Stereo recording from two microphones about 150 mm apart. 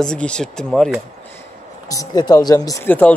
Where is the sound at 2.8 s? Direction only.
10° left (ahead or behind).